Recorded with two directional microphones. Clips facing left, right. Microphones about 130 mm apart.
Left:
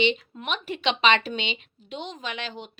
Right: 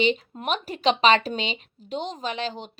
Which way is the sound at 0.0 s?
40° right (ahead or behind).